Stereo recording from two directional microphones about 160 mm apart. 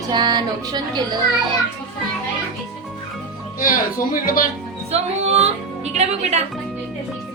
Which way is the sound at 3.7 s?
60° left (ahead or behind).